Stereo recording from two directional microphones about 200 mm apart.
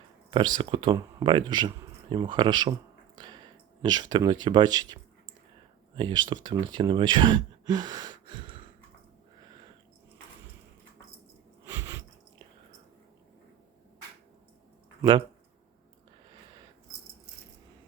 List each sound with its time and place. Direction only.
0.3 s speech: 25° right (ahead or behind)
11.7 s chewing: 15° right (ahead or behind)